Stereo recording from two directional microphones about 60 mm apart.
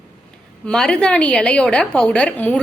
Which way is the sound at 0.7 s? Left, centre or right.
Centre.